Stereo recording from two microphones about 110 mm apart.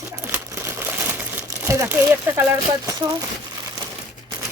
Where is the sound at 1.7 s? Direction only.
20° right (ahead or behind).